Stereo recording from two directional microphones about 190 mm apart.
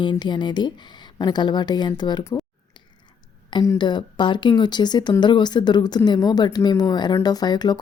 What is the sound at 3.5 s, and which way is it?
Speech, 20° left (ahead or behind).